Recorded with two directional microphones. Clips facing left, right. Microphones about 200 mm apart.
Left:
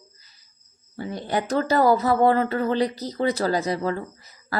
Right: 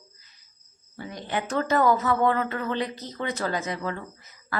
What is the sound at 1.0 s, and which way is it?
Speech, 35° left (ahead or behind).